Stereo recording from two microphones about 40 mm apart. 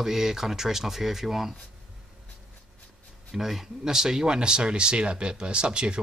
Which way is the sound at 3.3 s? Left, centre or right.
Centre.